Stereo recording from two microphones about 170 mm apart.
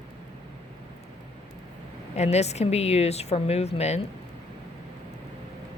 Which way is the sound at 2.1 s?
40° left (ahead or behind).